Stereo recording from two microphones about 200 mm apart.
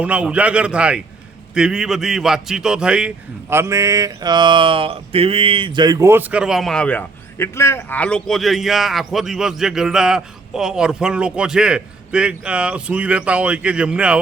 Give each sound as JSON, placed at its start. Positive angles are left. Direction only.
{"t": 0.0, "sound": "mantra", "side_deg": -5}